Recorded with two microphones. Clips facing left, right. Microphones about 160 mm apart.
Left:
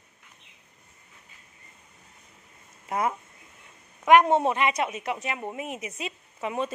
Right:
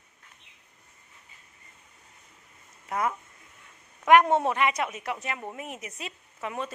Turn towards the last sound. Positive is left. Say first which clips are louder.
# left 4 dB
turn(degrees=20)  # may be behind; listen again after turning